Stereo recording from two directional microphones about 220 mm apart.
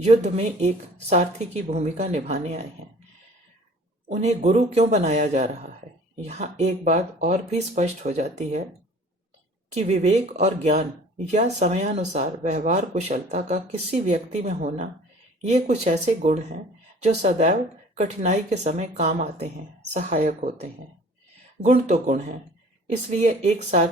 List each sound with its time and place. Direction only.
0.0 s speech: 30° right (ahead or behind)
4.1 s speech: 30° right (ahead or behind)
9.7 s speech: 30° right (ahead or behind)
23.2 s speech: 30° right (ahead or behind)